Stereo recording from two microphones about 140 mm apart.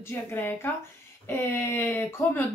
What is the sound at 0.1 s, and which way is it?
Speech, 15° left (ahead or behind).